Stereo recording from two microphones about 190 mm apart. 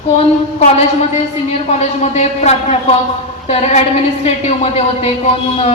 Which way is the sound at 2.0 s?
35° left (ahead or behind).